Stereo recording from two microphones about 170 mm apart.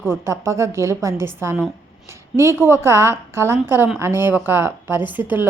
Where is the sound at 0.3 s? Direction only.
15° right (ahead or behind).